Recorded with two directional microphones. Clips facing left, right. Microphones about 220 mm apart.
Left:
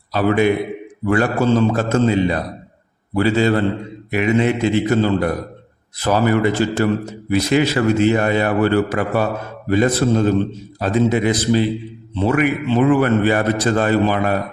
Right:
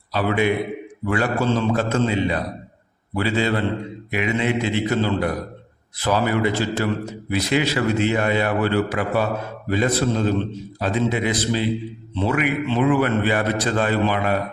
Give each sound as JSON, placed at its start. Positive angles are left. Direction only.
{"t": 0.1, "sound": "a man's voice", "side_deg": 45}